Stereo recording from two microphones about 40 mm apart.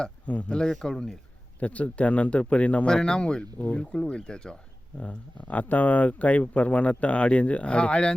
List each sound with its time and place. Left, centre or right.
0.3 s speech: left
0.6 s speech: centre
1.5 s speech: left
2.8 s speech: left
4.9 s speech: left